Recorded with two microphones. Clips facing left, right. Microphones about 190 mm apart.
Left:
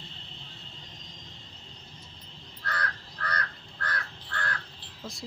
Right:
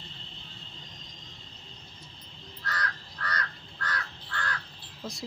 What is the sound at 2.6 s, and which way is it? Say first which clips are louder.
Crow: left 1 dB; 55° left (ahead or behind).